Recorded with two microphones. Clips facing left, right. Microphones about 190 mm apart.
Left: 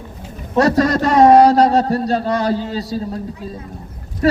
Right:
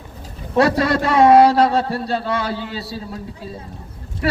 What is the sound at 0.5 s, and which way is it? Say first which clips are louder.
A man's voice: left 2 dB; 40° left (ahead or behind).